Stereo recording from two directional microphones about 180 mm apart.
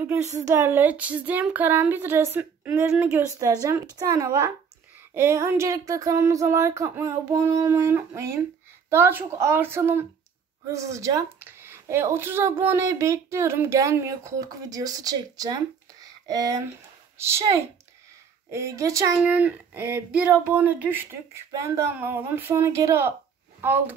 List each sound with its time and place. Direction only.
0.0 s speech: 15° right (ahead or behind)